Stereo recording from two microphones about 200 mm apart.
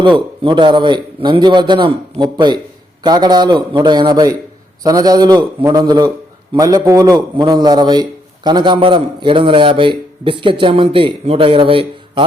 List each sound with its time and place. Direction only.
0.0 s a man's voice: 25° right (ahead or behind)